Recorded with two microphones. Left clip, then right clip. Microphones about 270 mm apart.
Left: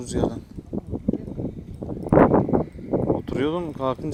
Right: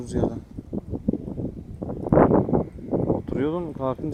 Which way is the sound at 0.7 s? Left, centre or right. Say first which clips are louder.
Left 1 dB; right.